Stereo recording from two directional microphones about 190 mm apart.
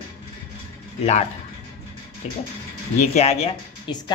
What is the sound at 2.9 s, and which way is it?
Speech, 35° left (ahead or behind).